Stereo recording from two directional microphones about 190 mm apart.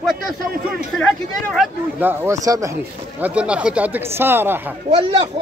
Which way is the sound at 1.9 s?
10° right (ahead or behind).